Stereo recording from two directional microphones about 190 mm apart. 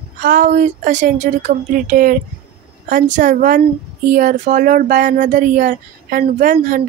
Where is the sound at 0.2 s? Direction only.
45° right (ahead or behind).